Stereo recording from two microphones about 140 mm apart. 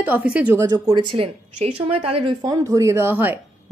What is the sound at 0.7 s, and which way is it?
Speech, 30° right (ahead or behind).